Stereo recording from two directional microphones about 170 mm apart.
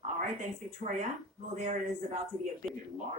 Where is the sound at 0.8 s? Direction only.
45° right (ahead or behind).